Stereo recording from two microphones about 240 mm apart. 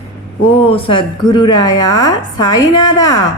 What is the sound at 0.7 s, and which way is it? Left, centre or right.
A woman's voice, left.